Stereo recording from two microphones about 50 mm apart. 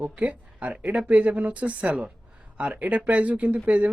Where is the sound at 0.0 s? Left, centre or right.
Right.